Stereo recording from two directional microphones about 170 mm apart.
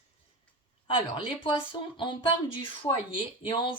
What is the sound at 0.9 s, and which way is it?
Speech, 30° left (ahead or behind).